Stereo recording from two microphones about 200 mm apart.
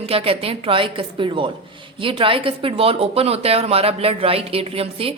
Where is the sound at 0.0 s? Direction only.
30° right (ahead or behind).